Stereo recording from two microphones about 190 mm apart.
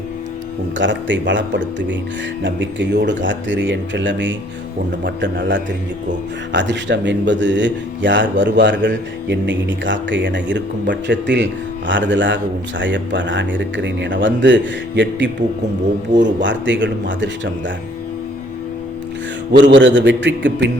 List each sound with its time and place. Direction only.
0.8 s a man's voice: 70° right (ahead or behind)
19.7 s a man's voice: 70° right (ahead or behind)